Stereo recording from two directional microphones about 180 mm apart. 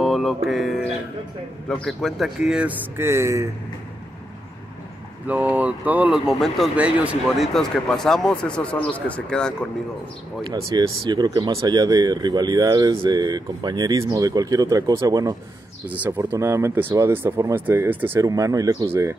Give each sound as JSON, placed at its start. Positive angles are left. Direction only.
{"t": 0.0, "sound": "music", "side_deg": 0}
{"t": 1.7, "sound": "speech", "side_deg": 0}
{"t": 5.2, "sound": "speech", "side_deg": -10}
{"t": 10.7, "sound": "speech", "side_deg": -25}